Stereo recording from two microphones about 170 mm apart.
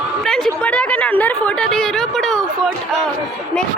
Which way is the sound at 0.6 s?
5° left (ahead or behind).